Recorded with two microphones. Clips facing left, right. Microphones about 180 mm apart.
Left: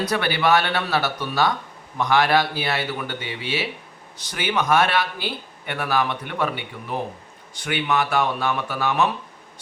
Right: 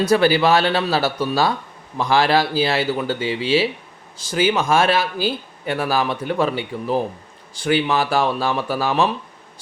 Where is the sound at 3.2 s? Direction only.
90° right.